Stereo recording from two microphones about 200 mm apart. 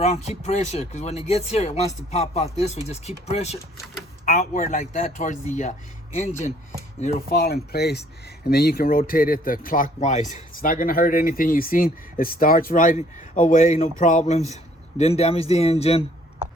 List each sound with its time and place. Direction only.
0.0 s speech: 35° left (ahead or behind)
7.3 s speech: 50° left (ahead or behind); by 16.0 s 30° left (ahead or behind)